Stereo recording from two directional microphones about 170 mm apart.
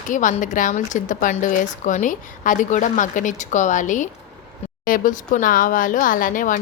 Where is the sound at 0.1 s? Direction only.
50° left (ahead or behind).